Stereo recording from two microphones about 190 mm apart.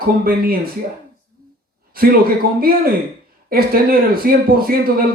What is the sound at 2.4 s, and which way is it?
A man's voice, 50° right (ahead or behind).